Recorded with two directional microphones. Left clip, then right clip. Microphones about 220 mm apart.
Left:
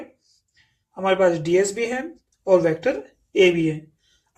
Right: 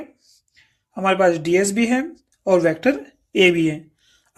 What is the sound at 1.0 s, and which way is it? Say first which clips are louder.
Speech: right 2 dB; 50° right (ahead or behind).